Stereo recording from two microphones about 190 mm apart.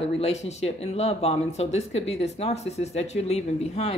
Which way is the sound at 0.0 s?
35° left (ahead or behind).